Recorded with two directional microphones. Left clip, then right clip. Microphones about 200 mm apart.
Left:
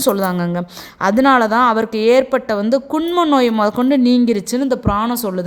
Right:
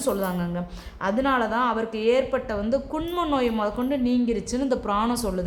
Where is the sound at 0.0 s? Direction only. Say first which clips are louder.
Left 9 dB; 50° left (ahead or behind).